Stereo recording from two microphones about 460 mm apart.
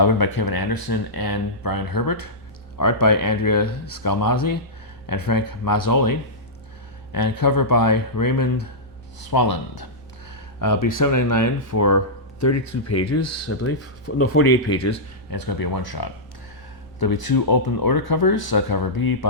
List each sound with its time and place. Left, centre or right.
0.0 s speech: left
10.6 s speech: left